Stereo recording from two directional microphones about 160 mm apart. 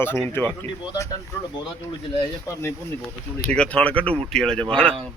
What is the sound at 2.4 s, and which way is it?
Speech, 15° left (ahead or behind).